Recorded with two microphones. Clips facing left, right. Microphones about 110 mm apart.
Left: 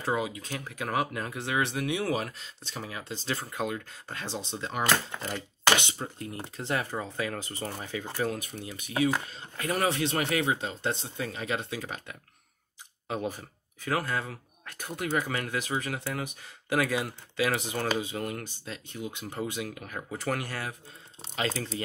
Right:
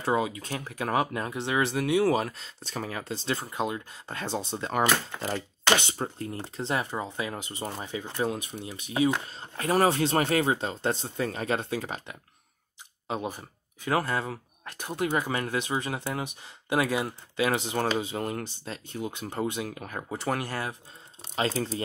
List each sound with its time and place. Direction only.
0.0 s speech: 30° right (ahead or behind)
3.5 s speech: 25° right (ahead or behind)
4.1 s speech: 40° right (ahead or behind)
6.4 s speech: 30° right (ahead or behind)
13.1 s speech: 20° right (ahead or behind)